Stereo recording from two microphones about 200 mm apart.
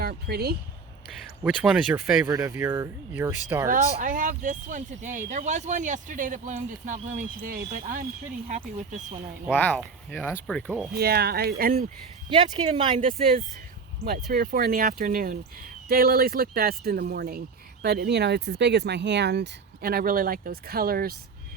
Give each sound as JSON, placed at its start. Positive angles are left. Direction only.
{"t": 0.0, "sound": "speech", "side_deg": -50}
{"t": 1.5, "sound": "speech", "side_deg": -5}
{"t": 3.7, "sound": "speech", "side_deg": -40}
{"t": 9.5, "sound": "speech", "side_deg": 5}
{"t": 10.9, "sound": "speech", "side_deg": -50}
{"t": 12.3, "sound": "speech", "side_deg": -25}
{"t": 13.0, "sound": "speech", "side_deg": -40}